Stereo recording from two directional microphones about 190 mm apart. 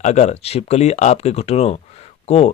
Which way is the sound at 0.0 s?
35° left (ahead or behind).